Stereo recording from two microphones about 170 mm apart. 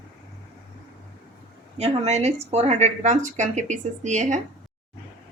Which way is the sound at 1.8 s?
40° right (ahead or behind).